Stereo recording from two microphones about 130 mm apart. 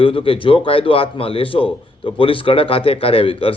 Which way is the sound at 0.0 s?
45° left (ahead or behind).